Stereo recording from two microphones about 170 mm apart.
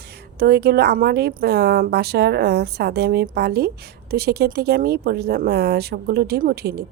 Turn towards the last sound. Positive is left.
turn(degrees=-70)  # may be behind; listen again after turning